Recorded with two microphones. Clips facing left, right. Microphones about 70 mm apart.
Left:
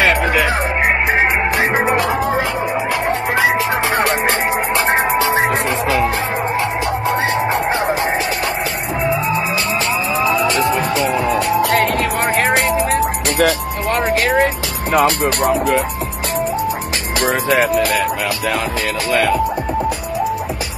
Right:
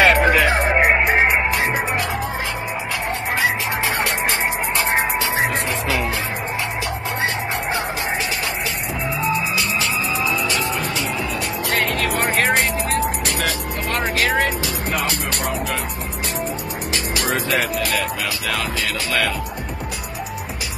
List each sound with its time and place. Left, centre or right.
0.0 s music: centre
4.0 s music: left
10.3 s music: left
12.2 s music: centre
13.4 s music: left
13.9 s music: centre
14.9 s speech: left
17.2 s speech: left